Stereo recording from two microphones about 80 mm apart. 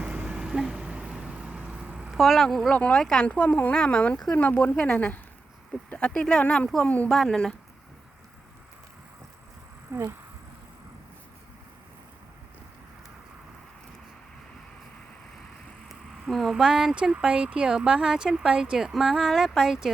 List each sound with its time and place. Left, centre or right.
0.0 s vehicle: centre
2.1 s speech: centre
2.7 s speech: centre
7.1 s speech: centre
9.9 s a sound: right
15.9 s speech: centre